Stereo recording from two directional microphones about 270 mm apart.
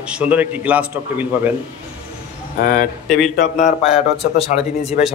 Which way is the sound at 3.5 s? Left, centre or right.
Left.